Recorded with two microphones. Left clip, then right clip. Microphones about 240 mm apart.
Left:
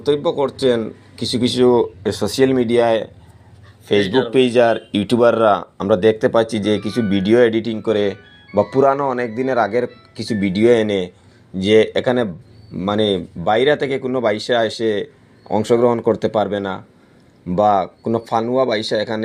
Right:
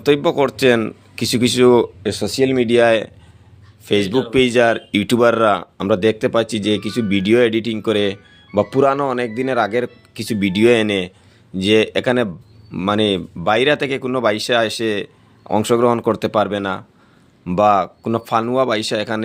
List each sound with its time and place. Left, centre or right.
0.0 s speech: right
2.2 s speech: centre
9.3 s speech: right
10.5 s speech: right